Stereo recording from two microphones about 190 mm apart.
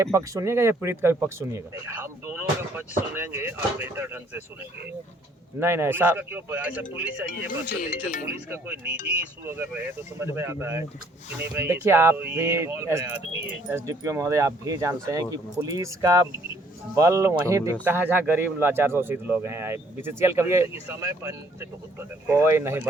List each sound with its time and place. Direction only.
0.0 s speech: 15° right (ahead or behind)
5.5 s speech: 15° right (ahead or behind)
7.8 s speech: 40° left (ahead or behind)
8.4 s speech: 10° right (ahead or behind)